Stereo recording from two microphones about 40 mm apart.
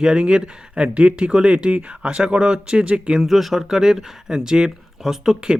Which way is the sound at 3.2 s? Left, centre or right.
Centre.